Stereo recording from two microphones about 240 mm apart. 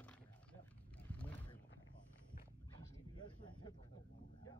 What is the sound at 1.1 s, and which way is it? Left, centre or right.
Wild animals, centre.